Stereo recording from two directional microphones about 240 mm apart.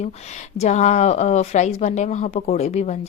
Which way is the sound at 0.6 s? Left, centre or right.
Left.